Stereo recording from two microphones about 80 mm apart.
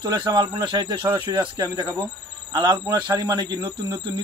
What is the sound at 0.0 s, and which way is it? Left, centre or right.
Speech, right.